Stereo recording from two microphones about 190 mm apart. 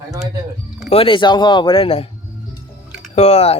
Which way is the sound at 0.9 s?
30° left (ahead or behind).